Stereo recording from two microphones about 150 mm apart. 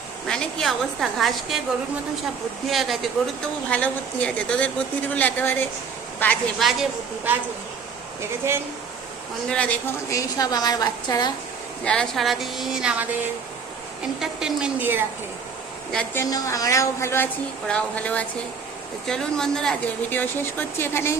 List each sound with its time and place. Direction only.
0.3 s a woman's voice: 5° left (ahead or behind)
2.6 s a woman's voice: centre (ahead or behind)
6.6 s a woman's voice: centre (ahead or behind)
8.2 s speech: 15° right (ahead or behind)
9.5 s speech: 10° left (ahead or behind)
10.1 s a woman's voice: 25° left (ahead or behind)
11.9 s a woman's voice: 5° left (ahead or behind)
14.2 s a woman's voice: 5° right (ahead or behind)
16.1 s a woman's voice: 20° left (ahead or behind)